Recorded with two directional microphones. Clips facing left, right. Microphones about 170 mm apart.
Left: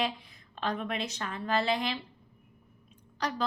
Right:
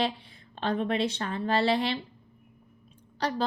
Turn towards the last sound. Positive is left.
turn(degrees=-30)  # may be behind; listen again after turning